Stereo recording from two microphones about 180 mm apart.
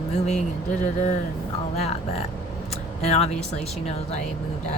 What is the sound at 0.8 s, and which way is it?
Speech, 40° left (ahead or behind).